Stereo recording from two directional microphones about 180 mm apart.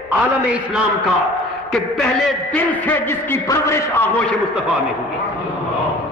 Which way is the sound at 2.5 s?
10° left (ahead or behind).